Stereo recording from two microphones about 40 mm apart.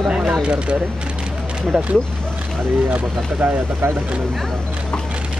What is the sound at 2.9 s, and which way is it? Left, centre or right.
Speech, right.